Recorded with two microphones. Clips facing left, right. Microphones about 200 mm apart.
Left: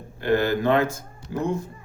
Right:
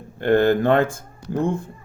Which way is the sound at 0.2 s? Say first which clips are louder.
Right 5 dB; 55° right (ahead or behind).